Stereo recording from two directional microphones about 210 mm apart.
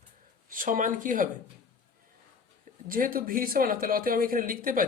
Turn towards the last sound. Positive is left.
turn(degrees=-40)  # may be behind; listen again after turning